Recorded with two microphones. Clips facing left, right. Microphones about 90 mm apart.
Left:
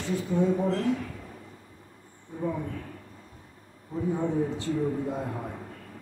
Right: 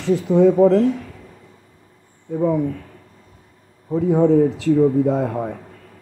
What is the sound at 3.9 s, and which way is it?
Speech, 80° right.